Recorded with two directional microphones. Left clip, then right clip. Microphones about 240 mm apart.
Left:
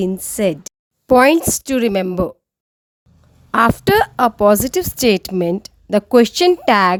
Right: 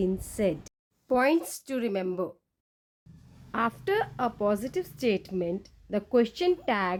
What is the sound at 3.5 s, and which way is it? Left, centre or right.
A woman's voice, left.